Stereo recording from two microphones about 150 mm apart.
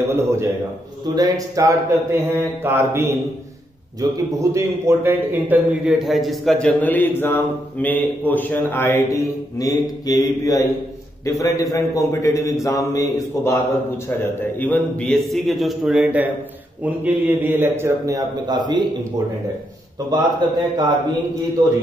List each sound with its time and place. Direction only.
0.0 s a man's voice: 15° right (ahead or behind); by 13.6 s 20° left (ahead or behind)
14.6 s a man's voice: 10° left (ahead or behind); by 18.9 s 30° right (ahead or behind)
20.1 s speech: 30° right (ahead or behind)